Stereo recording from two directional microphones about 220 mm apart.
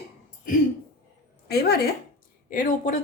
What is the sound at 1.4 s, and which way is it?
A woman's voice, 45° left (ahead or behind).